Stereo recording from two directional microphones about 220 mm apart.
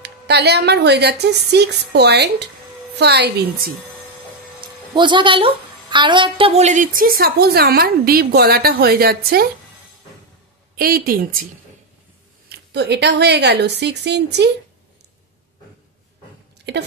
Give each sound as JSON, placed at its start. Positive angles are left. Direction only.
{"t": 0.0, "sound": "a woman's voice", "side_deg": -50}
{"t": 4.6, "sound": "a woman's voice", "side_deg": -20}
{"t": 10.8, "sound": "a woman's voice", "side_deg": -40}
{"t": 12.4, "sound": "a woman's voice", "side_deg": -50}
{"t": 16.7, "sound": "speech", "side_deg": -50}